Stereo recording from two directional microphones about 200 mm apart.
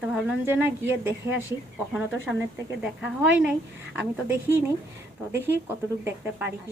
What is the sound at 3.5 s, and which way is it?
A woman's voice, 10° right (ahead or behind).